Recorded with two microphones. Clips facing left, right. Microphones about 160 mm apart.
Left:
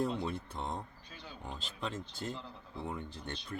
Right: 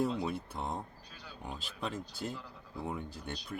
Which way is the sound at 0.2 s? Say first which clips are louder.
Right 2 dB; 5° right (ahead or behind).